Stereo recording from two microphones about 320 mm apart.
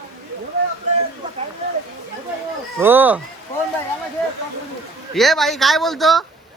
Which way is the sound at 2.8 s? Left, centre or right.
Centre.